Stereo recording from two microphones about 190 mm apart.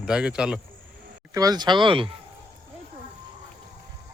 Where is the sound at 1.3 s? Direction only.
20° right (ahead or behind).